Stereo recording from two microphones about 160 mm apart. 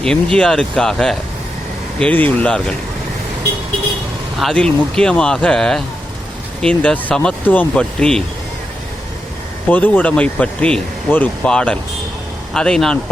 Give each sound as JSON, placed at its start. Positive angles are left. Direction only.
{"t": 0.0, "sound": "speech", "side_deg": 5}
{"t": 4.4, "sound": "speech", "side_deg": 5}
{"t": 9.6, "sound": "speech", "side_deg": 10}